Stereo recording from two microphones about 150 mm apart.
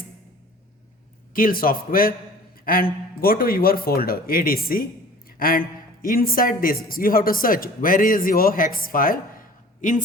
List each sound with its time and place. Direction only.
1.3 s a man's voice: 70° left (ahead or behind)